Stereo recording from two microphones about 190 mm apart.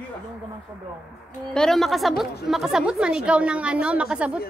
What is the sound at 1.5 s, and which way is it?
A woman's voice, centre (ahead or behind).